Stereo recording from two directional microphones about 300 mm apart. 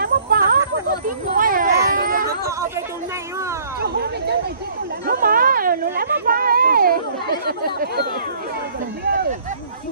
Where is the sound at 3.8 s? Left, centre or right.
Right.